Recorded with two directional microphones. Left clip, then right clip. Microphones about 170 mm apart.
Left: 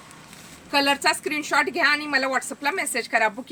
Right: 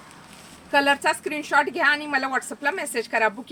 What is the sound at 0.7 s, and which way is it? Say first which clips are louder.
A woman's voice: right 1 dB; 20° left (ahead or behind).